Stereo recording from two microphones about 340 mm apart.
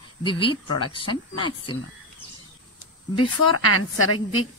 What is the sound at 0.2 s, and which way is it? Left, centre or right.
Speech, centre.